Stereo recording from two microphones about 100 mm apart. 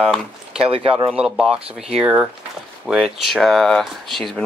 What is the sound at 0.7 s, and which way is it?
Speech, 70° right (ahead or behind).